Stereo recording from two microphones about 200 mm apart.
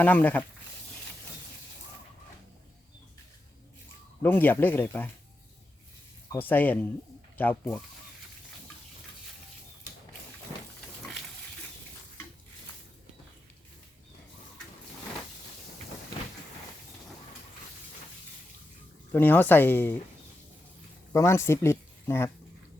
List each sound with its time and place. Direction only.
0.0 s speech: 10° left (ahead or behind)
4.2 s speech: 10° left (ahead or behind)
6.3 s speech: 10° left (ahead or behind)
19.1 s speech: 10° left (ahead or behind)
21.1 s speech: 15° left (ahead or behind)